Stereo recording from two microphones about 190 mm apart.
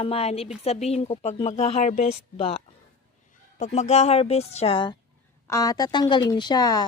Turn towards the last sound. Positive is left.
turn(degrees=20)  # may be behind; listen again after turning